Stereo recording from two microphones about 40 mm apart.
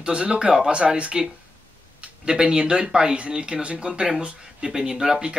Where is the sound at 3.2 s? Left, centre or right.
Right.